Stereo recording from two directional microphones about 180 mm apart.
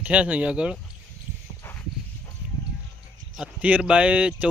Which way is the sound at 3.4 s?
5° right (ahead or behind).